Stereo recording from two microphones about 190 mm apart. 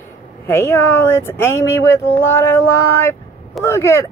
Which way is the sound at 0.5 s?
15° left (ahead or behind).